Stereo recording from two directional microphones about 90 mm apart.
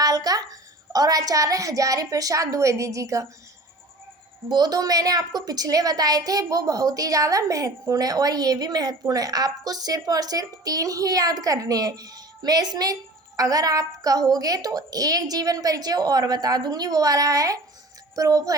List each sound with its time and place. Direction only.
0.0 s a sound: 45° right (ahead or behind)
0.9 s a woman's voice: 40° right (ahead or behind)
4.4 s a woman's voice: 50° right (ahead or behind)
18.1 s child singing: 40° right (ahead or behind)